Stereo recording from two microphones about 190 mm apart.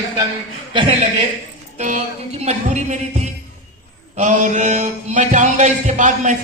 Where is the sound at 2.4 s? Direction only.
40° right (ahead or behind).